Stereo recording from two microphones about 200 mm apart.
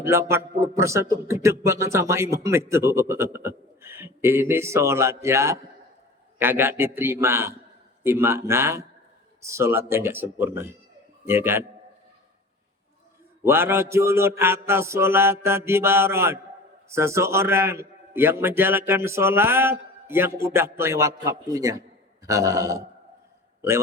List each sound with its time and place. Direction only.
0.0 s a man's voice: 15° right (ahead or behind)
13.4 s a man's voice: 10° right (ahead or behind)